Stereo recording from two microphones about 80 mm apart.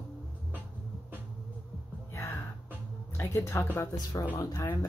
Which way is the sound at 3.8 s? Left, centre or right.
Left.